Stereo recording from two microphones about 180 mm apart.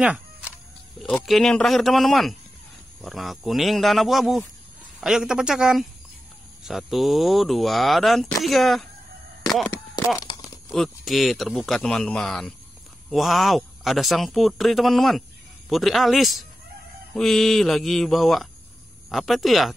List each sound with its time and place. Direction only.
0.0 s music: 5° right (ahead or behind)
1.0 s speech: centre (ahead or behind)
10.2 s tearing: 25° left (ahead or behind)
10.7 s speech: centre (ahead or behind)